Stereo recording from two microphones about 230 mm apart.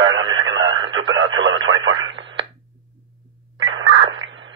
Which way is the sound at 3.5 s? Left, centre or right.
Right.